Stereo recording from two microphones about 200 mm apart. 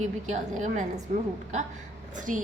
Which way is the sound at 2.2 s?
40° right (ahead or behind).